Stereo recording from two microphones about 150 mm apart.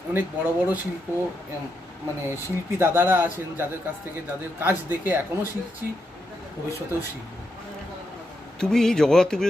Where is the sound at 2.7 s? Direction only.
15° right (ahead or behind).